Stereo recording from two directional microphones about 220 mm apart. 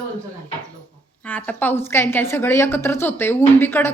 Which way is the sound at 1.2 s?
5° left (ahead or behind).